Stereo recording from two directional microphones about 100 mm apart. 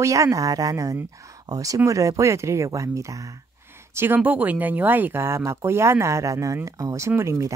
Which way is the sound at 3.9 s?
20° right (ahead or behind).